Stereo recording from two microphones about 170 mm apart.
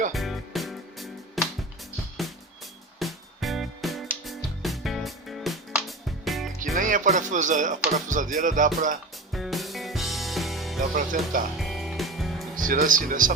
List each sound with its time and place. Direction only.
0.1 s music: centre (ahead or behind)
6.7 s speech: 50° right (ahead or behind)
8.0 s music: 50° right (ahead or behind)
9.3 s music: centre (ahead or behind)
10.9 s music: 50° right (ahead or behind)
11.5 s music: centre (ahead or behind)
12.5 s music: 50° right (ahead or behind)